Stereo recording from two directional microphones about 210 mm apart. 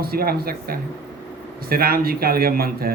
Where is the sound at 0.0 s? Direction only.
45° right (ahead or behind).